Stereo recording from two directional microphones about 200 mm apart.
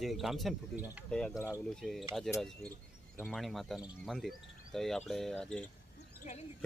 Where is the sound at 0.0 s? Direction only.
Centre (ahead or behind).